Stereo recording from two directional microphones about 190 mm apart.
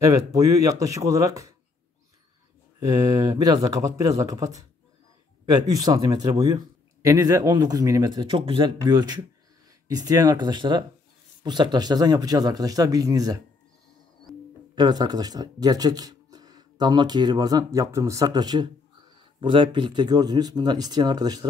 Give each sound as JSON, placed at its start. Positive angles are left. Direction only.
{"t": 0.0, "sound": "speech", "side_deg": -20}
{"t": 3.1, "sound": "speech", "side_deg": -20}
{"t": 14.3, "sound": "music", "side_deg": 0}
{"t": 14.8, "sound": "speech", "side_deg": -20}